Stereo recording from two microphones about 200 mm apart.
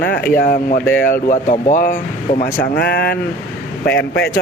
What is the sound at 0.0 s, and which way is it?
Speech, 45° left (ahead or behind).